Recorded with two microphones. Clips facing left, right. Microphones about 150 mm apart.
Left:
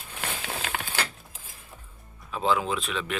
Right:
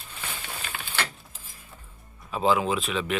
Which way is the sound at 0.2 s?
90° left.